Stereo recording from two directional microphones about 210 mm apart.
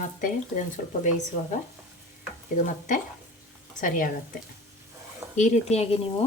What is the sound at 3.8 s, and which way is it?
Speech, 40° left (ahead or behind).